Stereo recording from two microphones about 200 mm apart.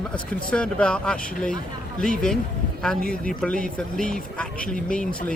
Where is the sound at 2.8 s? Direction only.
5° left (ahead or behind).